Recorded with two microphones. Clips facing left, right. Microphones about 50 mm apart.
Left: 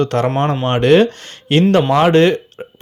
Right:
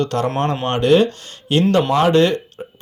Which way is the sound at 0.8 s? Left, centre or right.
Left.